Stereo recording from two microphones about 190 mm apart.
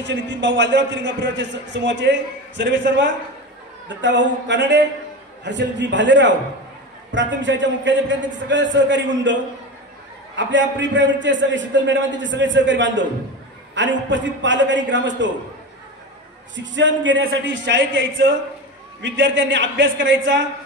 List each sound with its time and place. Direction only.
0.0 s a man's voice: 70° right (ahead or behind)
16.5 s a man's voice: 75° right (ahead or behind)